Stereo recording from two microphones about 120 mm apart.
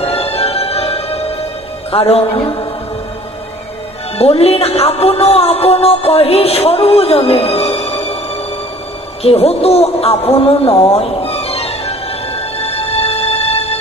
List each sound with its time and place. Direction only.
0.0 s music: 55° left (ahead or behind)
1.9 s a man's voice: 55° left (ahead or behind)
4.2 s a man's voice: 55° left (ahead or behind)
9.2 s a sound: 55° left (ahead or behind)